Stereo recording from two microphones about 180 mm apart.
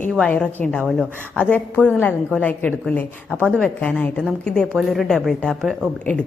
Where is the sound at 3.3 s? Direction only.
10° right (ahead or behind).